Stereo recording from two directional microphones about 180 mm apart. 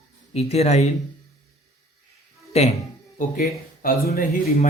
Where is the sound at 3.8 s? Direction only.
60° left (ahead or behind).